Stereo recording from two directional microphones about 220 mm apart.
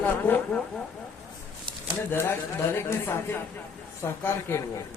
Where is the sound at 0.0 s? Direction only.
10° left (ahead or behind).